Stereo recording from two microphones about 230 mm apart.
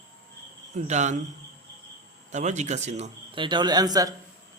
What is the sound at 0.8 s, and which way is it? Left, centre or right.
Speech, right.